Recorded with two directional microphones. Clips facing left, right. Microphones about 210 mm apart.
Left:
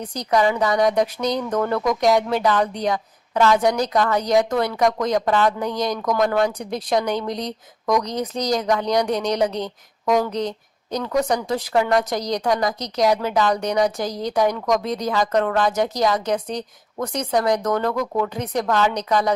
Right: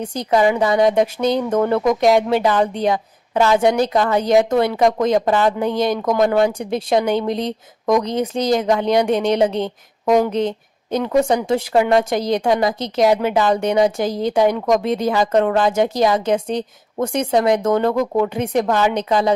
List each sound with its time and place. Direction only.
0.0 s speech: 25° right (ahead or behind)